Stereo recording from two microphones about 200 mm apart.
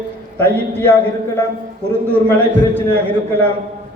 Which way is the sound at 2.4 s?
10° left (ahead or behind).